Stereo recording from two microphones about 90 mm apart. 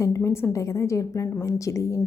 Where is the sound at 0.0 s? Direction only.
35° left (ahead or behind).